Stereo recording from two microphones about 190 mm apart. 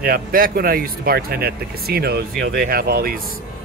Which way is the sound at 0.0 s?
50° right (ahead or behind).